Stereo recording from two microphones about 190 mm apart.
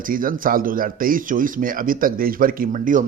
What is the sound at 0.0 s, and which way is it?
Speech, 45° right (ahead or behind).